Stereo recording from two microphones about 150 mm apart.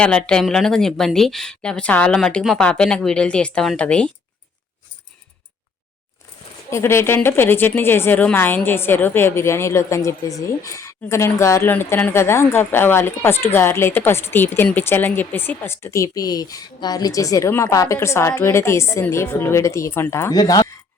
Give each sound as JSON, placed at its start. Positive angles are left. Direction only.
{"t": 0.0, "sound": "speech", "side_deg": 5}
{"t": 6.7, "sound": "a woman's voice", "side_deg": 20}